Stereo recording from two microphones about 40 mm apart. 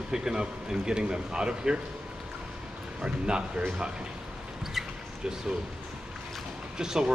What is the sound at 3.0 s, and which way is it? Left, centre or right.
Speech, right.